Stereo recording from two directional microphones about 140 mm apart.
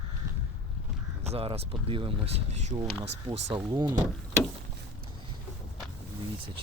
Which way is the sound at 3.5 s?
30° right (ahead or behind).